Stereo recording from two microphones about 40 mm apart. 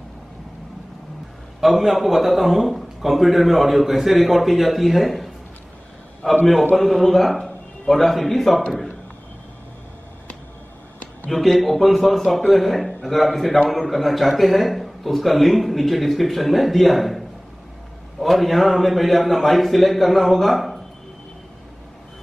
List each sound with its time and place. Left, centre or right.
1.6 s a man's voice: centre
6.2 s a man's voice: centre
6.7 s a man's voice: centre
11.2 s a man's voice: centre
18.2 s a man's voice: centre